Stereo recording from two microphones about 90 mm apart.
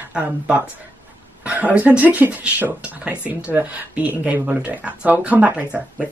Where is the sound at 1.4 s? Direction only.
15° right (ahead or behind).